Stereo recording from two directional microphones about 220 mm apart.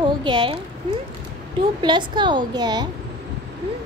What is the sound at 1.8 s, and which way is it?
Speech, 20° right (ahead or behind).